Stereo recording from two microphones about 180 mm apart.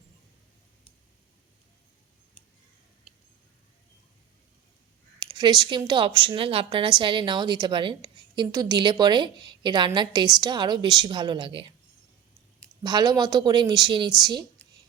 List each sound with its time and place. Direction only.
5.2 s speech: 20° right (ahead or behind)
12.8 s speech: 20° right (ahead or behind)